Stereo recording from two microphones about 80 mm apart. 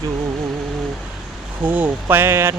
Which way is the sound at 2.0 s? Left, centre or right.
Right.